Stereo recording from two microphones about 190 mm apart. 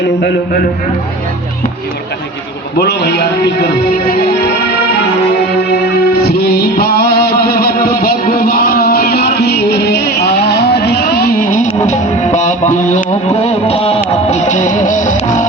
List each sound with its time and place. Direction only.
0.0 s a man's voice: 60° left (ahead or behind)
2.7 s speech: 60° left (ahead or behind)
5.5 s music: 60° left (ahead or behind); by 15.4 s 40° left (ahead or behind)